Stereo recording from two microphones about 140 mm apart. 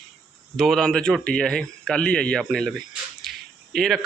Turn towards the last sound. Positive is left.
turn(degrees=0)  # may be behind; listen again after turning